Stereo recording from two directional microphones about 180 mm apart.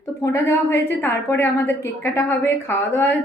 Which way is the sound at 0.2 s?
15° left (ahead or behind).